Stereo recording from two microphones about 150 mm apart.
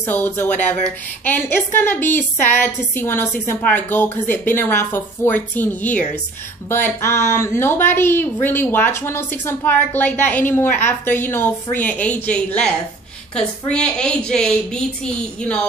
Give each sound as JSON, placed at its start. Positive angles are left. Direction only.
{"t": 0.0, "sound": "a woman's voice", "side_deg": 15}